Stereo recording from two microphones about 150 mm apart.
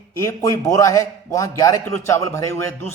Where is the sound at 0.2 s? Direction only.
20° left (ahead or behind).